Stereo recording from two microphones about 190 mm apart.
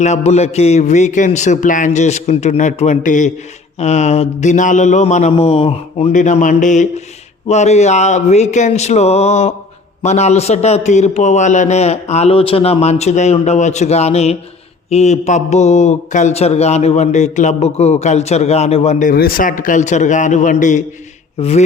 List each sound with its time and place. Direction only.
0.0 s a man's voice: 35° left (ahead or behind)
19.1 s a man's voice: 50° left (ahead or behind)